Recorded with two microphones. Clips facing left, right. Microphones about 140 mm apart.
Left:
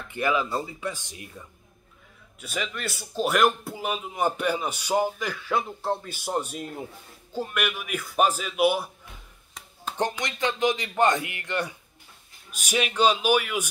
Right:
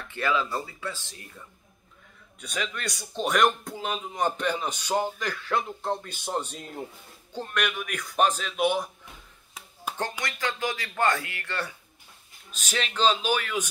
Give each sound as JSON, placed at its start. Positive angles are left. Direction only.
{"t": 0.1, "sound": "a man's voice", "side_deg": 15}
{"t": 2.4, "sound": "a man's voice", "side_deg": 5}
{"t": 10.2, "sound": "a man's voice", "side_deg": 20}